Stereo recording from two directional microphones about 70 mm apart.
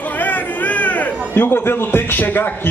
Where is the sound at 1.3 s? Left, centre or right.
Left.